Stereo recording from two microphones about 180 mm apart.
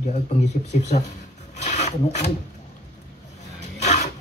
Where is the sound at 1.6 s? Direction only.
40° left (ahead or behind).